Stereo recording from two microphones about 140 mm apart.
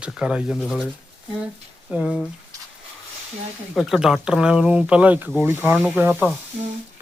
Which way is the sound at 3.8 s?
Centre (ahead or behind).